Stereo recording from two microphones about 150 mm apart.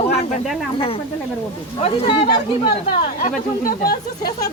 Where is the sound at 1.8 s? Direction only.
45° left (ahead or behind).